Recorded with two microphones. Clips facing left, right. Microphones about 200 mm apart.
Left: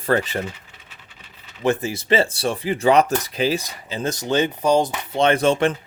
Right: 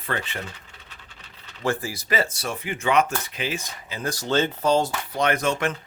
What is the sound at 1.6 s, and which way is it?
Speech, 20° left (ahead or behind).